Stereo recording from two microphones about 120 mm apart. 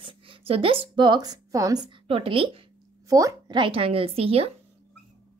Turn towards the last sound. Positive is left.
turn(degrees=-55)  # may be behind; listen again after turning